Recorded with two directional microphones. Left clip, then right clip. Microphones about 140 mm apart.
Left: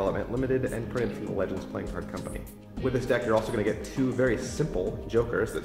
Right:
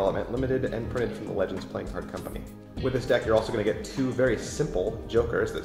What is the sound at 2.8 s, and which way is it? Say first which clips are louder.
Speech: right 2 dB; 30° left (ahead or behind).